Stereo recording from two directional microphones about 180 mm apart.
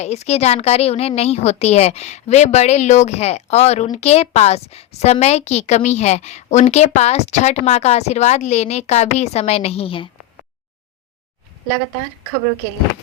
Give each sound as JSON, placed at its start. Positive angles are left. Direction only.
{"t": 0.0, "sound": "a woman's voice", "side_deg": 40}